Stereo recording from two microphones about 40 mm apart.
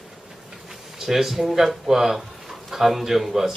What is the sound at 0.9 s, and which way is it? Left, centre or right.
A man's voice, centre.